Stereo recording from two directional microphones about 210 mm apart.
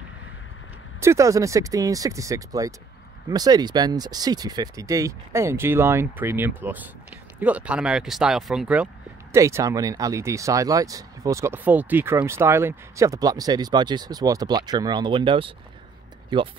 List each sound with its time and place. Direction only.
1.0 s speech: 15° right (ahead or behind)